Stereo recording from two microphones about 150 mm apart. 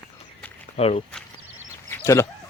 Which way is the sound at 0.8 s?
40° left (ahead or behind).